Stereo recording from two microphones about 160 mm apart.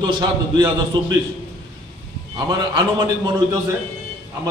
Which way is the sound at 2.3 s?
30° right (ahead or behind).